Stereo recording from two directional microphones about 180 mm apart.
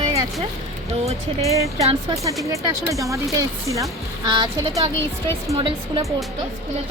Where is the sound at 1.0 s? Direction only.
35° right (ahead or behind).